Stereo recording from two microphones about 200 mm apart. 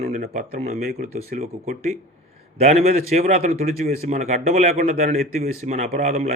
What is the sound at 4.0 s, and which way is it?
Speech, 35° right (ahead or behind).